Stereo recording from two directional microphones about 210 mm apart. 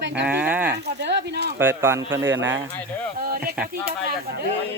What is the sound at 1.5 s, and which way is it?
A man's voice, 10° right (ahead or behind).